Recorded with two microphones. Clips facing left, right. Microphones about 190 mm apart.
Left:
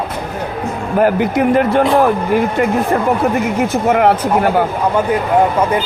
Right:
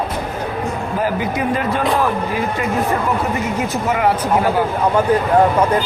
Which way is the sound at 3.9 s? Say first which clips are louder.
Left 5 dB; 60° left (ahead or behind).